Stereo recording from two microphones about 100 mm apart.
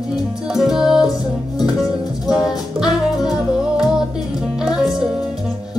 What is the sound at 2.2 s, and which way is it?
Music, 5° right (ahead or behind).